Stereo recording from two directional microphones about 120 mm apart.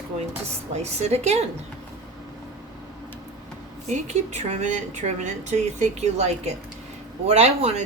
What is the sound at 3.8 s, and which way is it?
A woman's voice, 75° right (ahead or behind).